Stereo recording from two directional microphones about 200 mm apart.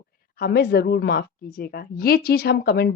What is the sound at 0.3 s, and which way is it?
A woman's voice, 55° left (ahead or behind).